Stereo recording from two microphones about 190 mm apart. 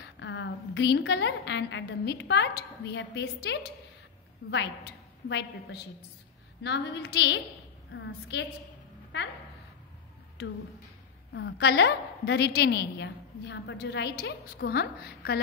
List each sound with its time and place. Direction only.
0.2 s a woman's voice: 70° left (ahead or behind)
11.3 s a woman's voice: 70° left (ahead or behind)